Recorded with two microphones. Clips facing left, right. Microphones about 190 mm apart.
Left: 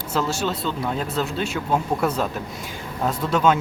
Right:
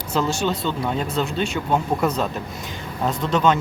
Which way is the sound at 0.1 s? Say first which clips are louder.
Right 2 dB; 5° left (ahead or behind).